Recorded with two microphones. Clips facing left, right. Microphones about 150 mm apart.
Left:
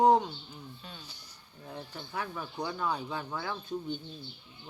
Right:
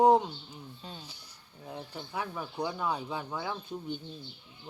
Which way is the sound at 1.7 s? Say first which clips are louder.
Right 1 dB; 15° right (ahead or behind).